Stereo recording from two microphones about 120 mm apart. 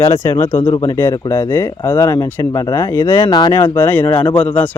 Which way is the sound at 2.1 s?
35° left (ahead or behind).